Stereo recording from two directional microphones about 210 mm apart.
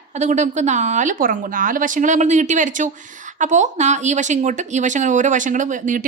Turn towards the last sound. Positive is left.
turn(degrees=-40)  # may be behind; listen again after turning